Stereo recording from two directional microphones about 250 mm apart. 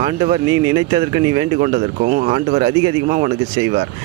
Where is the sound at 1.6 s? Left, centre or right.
Right.